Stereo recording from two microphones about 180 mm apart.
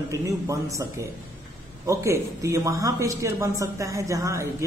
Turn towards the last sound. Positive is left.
turn(degrees=-15)  # may be behind; listen again after turning